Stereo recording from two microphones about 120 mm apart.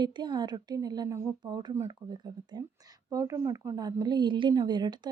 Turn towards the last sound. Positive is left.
turn(degrees=-35)  # may be behind; listen again after turning